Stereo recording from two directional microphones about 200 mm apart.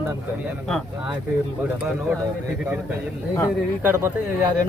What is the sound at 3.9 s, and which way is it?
Speech, 10° right (ahead or behind).